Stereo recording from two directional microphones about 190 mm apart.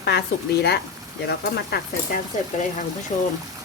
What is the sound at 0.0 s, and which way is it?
Speech, 60° left (ahead or behind).